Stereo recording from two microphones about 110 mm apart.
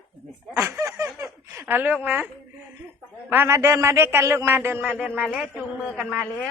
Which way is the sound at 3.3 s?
20° right (ahead or behind).